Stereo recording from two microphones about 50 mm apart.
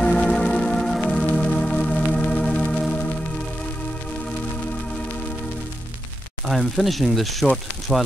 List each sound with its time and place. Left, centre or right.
0.0 s organ: left
1.0 s music: left
6.5 s speech: centre